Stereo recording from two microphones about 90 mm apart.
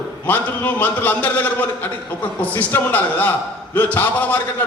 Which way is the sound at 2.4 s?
20° left (ahead or behind).